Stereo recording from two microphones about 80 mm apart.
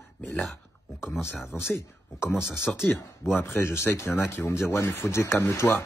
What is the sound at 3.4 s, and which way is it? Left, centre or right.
A man's voice, left.